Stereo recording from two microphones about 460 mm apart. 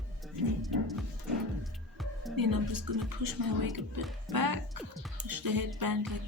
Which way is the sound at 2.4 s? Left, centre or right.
Right.